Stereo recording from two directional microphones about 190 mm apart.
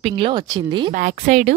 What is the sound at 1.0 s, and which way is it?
Speech, 40° right (ahead or behind).